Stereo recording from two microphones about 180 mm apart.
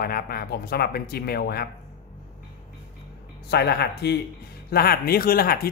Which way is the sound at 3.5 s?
65° left (ahead or behind).